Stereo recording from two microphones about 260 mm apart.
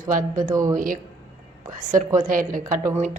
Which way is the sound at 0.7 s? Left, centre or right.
Right.